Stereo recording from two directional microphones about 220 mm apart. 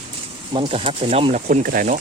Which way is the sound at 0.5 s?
25° right (ahead or behind).